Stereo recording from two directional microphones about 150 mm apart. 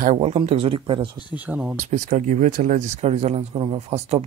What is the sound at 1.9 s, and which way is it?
A man's voice, 55° right (ahead or behind).